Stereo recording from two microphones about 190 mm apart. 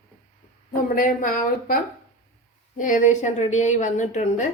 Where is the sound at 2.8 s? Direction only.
40° left (ahead or behind).